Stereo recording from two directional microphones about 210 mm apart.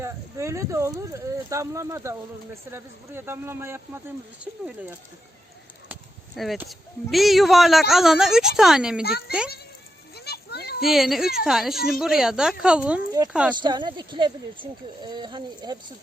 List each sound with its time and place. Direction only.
0.0 s speech: 15° right (ahead or behind)
9.0 s a child's voice: 50° left (ahead or behind)
10.2 s children playing: 50° left (ahead or behind)
10.8 s speech: centre (ahead or behind)
13.5 s speech: 20° right (ahead or behind)